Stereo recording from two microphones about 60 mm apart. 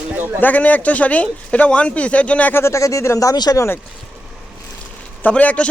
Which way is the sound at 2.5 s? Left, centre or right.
Left.